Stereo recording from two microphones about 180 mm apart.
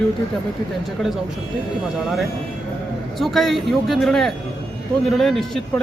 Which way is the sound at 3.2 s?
Centre (ahead or behind).